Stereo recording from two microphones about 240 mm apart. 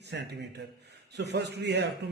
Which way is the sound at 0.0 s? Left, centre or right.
Right.